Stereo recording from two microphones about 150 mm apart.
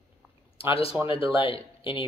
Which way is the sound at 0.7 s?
40° left (ahead or behind).